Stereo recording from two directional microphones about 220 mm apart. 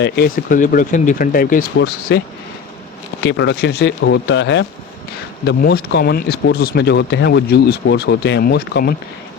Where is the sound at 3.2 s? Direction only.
50° left (ahead or behind).